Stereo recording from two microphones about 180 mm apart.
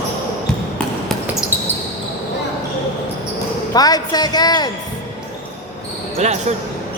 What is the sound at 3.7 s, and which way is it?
A woman's voice, 20° left (ahead or behind).